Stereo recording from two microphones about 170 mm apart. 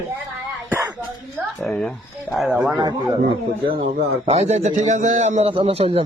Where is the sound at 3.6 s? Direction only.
35° right (ahead or behind).